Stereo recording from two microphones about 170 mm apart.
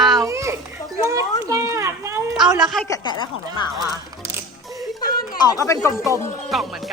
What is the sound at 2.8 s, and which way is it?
Speech, 25° left (ahead or behind).